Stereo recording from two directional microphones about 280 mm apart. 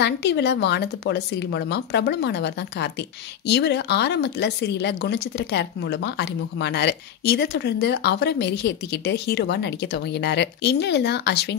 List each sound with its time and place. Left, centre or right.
0.0 s speech: left